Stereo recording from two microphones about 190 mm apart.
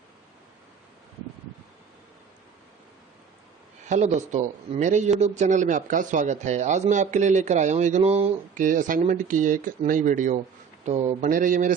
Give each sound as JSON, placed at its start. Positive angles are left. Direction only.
{"t": 3.8, "sound": "a man's voice", "side_deg": -40}